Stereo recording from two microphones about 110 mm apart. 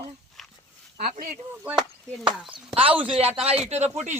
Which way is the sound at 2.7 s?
55° right (ahead or behind).